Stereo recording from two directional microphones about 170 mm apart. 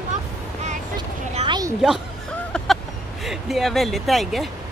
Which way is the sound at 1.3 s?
25° right (ahead or behind).